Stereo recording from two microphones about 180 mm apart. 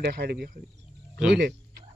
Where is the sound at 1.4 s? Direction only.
65° right (ahead or behind).